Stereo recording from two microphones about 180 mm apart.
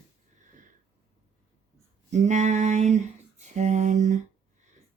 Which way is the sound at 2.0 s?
40° right (ahead or behind).